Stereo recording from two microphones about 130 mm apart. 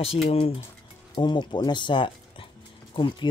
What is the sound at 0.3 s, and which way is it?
Speech, 45° left (ahead or behind).